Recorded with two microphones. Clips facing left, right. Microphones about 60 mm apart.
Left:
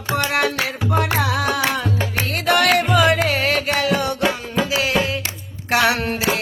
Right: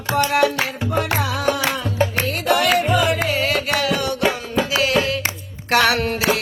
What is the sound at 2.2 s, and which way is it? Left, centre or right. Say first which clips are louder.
Music: left 4 dB; left.